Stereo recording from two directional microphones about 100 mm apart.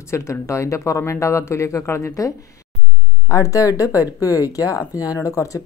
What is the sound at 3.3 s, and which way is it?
Speech, 35° left (ahead or behind).